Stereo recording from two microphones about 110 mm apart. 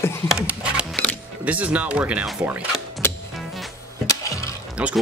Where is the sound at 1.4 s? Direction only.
10° right (ahead or behind).